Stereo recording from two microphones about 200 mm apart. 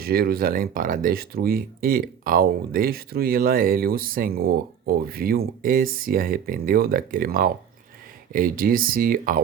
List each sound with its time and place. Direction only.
0.0 s speech: 50° right (ahead or behind)